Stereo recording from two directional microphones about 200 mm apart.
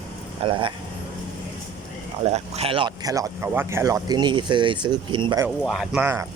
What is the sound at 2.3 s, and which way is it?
Speech, 30° right (ahead or behind).